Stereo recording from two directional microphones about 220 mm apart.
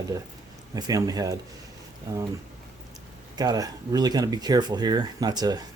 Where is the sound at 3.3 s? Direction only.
20° right (ahead or behind).